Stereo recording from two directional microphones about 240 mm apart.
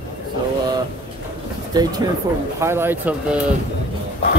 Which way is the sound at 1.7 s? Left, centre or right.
Centre.